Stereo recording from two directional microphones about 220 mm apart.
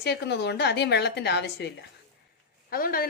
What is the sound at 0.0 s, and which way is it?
A woman's voice, 50° left (ahead or behind).